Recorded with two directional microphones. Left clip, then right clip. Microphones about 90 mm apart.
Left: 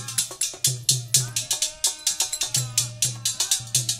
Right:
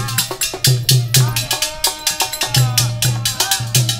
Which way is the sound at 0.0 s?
25° left (ahead or behind).